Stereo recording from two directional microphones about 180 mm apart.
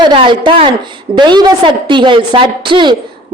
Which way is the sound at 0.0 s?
25° right (ahead or behind).